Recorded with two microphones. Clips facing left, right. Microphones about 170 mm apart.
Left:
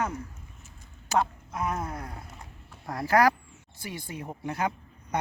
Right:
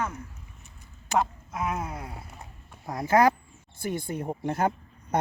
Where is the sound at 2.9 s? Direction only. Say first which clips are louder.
Right 1 dB; 20° right (ahead or behind).